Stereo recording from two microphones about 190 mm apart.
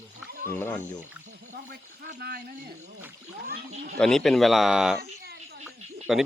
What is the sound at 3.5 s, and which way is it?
Speech, 50° right (ahead or behind).